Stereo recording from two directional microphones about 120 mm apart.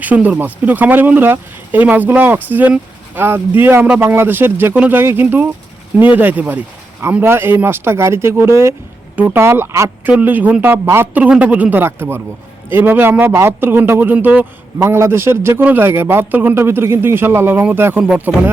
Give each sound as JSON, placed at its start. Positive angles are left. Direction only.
{"t": 0.0, "sound": "a man's voice", "side_deg": -15}